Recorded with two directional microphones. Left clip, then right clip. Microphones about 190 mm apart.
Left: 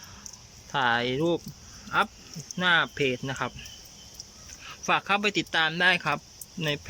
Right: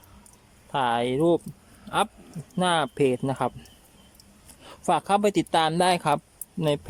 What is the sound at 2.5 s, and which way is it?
Speech, 20° right (ahead or behind).